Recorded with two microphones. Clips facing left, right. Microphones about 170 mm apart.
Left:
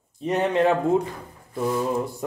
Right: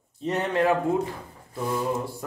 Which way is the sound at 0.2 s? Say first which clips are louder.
Left 3 dB; 15° left (ahead or behind).